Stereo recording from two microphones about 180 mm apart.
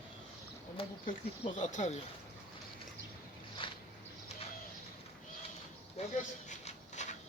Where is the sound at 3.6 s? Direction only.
30° left (ahead or behind).